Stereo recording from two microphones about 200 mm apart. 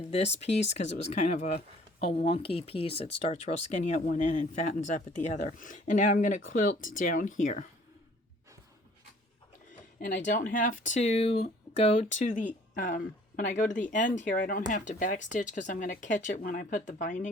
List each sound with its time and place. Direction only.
0.4 s speech: 35° left (ahead or behind)
10.0 s speech: 40° left (ahead or behind)